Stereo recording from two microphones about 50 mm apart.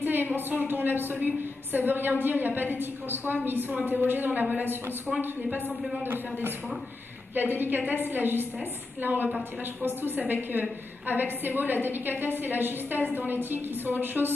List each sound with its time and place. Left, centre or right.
0.0 s a sound: right
0.5 s a woman's voice: right
6.0 s a woman's voice: right
9.8 s a woman's voice: right